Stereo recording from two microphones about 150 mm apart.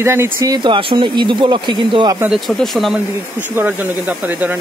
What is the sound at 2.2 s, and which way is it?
Speech, centre (ahead or behind).